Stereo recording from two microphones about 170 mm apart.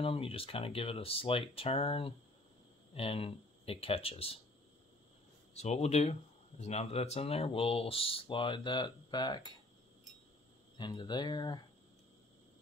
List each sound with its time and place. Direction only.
0.0 s speech: 35° left (ahead or behind)
5.5 s speech: 40° left (ahead or behind); by 9.5 s 25° left (ahead or behind)
10.8 s speech: 25° left (ahead or behind)